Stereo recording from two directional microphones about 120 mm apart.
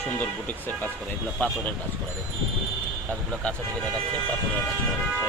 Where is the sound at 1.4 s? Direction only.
15° left (ahead or behind).